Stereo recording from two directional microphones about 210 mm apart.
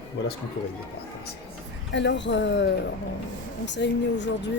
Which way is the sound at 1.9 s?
60° left (ahead or behind).